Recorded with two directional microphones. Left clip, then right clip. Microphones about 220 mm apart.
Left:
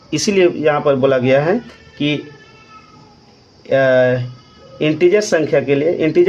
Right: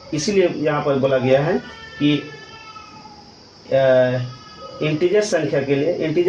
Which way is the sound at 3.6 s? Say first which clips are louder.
Left 2 dB; 35° left (ahead or behind).